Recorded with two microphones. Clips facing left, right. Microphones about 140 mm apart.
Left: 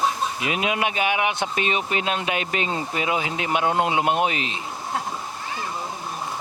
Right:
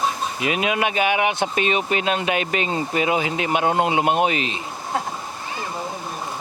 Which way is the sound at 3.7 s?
15° right (ahead or behind).